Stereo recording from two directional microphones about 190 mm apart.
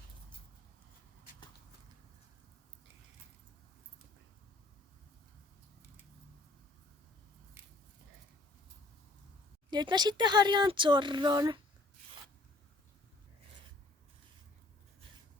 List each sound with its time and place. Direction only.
9.6 s speech: 20° right (ahead or behind)